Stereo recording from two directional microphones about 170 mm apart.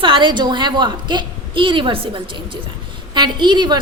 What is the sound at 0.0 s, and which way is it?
A woman's voice, 30° right (ahead or behind).